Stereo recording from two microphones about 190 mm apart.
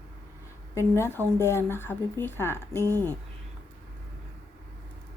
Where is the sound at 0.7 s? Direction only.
15° left (ahead or behind).